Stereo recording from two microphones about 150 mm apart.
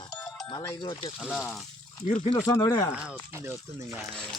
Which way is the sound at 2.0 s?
60° left (ahead or behind).